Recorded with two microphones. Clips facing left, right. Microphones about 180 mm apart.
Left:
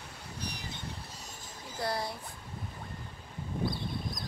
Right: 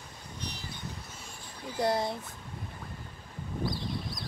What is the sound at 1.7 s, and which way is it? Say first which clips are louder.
Speech: right 6 dB; 20° right (ahead or behind).